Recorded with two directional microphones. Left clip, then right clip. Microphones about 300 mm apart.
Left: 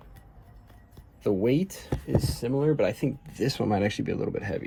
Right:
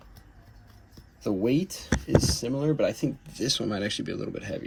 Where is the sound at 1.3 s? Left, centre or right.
Left.